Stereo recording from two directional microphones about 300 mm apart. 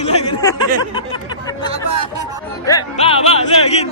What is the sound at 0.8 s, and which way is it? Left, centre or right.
Music, centre.